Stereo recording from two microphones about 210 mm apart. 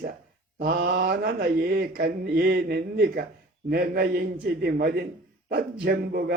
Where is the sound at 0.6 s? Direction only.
45° right (ahead or behind).